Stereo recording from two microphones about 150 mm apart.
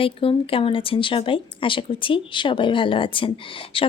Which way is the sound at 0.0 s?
35° left (ahead or behind).